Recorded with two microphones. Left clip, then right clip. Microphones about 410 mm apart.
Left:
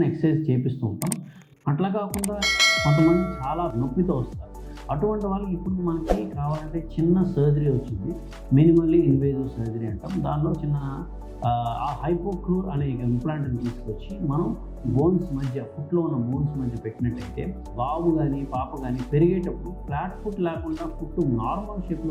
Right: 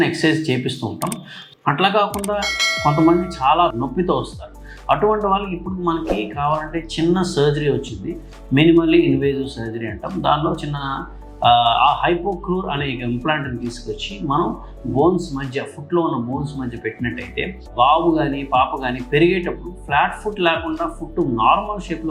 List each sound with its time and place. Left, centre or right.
0.0 s speech: centre
14.9 s speech: centre
15.2 s speech: centre